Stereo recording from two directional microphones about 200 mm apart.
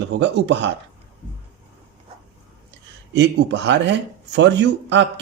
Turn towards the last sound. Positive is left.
turn(degrees=-60)  # may be behind; listen again after turning